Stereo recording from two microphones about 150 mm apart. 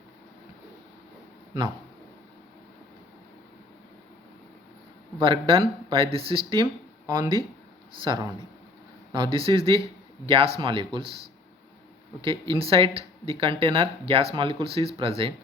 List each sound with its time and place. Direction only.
5.2 s speech: 35° right (ahead or behind)
8.1 s speech: 25° right (ahead or behind)
12.2 s speech: 35° right (ahead or behind)